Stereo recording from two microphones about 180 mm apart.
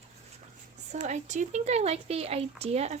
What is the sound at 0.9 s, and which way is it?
A woman's voice, 40° right (ahead or behind).